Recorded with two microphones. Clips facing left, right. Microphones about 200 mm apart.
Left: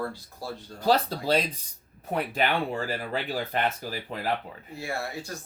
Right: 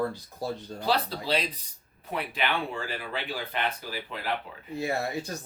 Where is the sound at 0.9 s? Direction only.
45° left (ahead or behind).